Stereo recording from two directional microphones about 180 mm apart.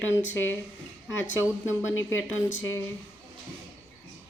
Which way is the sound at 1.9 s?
90° left.